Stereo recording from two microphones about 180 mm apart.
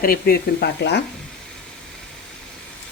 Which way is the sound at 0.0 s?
55° left (ahead or behind).